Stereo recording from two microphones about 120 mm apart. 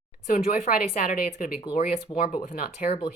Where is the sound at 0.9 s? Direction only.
90° left.